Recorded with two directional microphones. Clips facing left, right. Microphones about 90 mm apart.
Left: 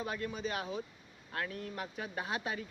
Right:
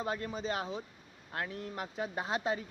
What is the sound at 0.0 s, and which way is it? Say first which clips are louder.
Speech: right 2 dB; 30° right (ahead or behind).